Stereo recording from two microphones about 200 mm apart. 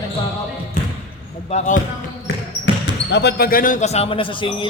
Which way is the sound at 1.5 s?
35° left (ahead or behind).